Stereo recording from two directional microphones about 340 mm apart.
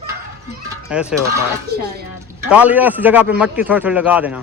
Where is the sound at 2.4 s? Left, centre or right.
Centre.